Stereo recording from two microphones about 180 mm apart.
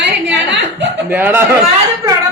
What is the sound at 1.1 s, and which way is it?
Speech, 10° right (ahead or behind).